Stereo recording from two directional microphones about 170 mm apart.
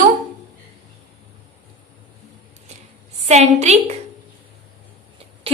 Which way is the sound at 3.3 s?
40° right (ahead or behind).